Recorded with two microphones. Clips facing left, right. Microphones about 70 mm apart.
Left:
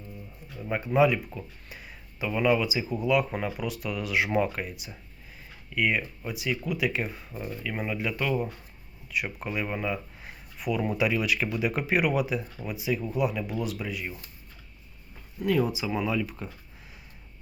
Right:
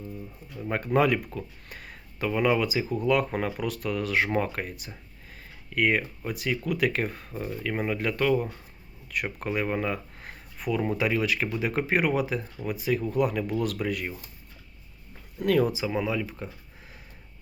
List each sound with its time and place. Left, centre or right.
0.9 s speech: right
10.8 s speech: right
12.6 s speech: right
15.4 s speech: right
15.9 s speech: right